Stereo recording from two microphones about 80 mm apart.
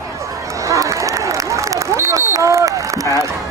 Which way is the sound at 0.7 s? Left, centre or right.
Right.